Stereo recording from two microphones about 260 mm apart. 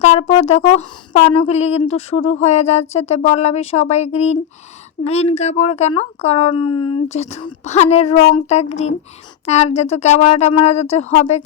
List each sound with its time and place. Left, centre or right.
0.0 s speech: left